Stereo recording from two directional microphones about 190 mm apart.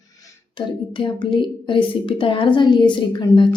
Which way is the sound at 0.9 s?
25° left (ahead or behind).